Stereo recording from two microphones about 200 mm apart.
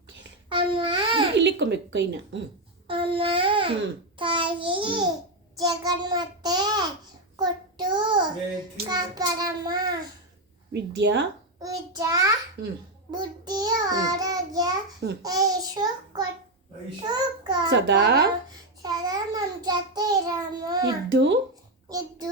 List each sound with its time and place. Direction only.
0.5 s babbling: 25° right (ahead or behind)
1.4 s speech: 60° right (ahead or behind)
2.8 s a sound: 25° right (ahead or behind)
4.2 s babbling: 25° right (ahead or behind)
5.5 s a child's voice: 20° right (ahead or behind)
7.3 s child singing: 20° right (ahead or behind)
10.7 s speech: 60° right (ahead or behind)
11.6 s child singing: 15° right (ahead or behind)
12.6 s a child's voice: 55° right (ahead or behind)
13.1 s child singing: 20° right (ahead or behind)
17.7 s speech: 60° right (ahead or behind)
18.8 s child singing: 20° right (ahead or behind)
21.1 s speech: 60° right (ahead or behind)
21.8 s a child's voice: 20° right (ahead or behind)